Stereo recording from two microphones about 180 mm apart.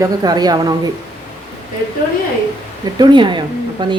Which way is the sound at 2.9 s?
25° right (ahead or behind).